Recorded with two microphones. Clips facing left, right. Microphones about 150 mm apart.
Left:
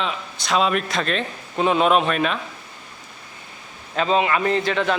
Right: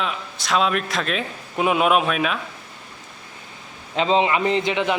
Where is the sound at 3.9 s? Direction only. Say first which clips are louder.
Right 1 dB; 25° right (ahead or behind).